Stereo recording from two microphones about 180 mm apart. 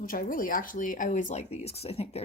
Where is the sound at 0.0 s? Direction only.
50° left (ahead or behind).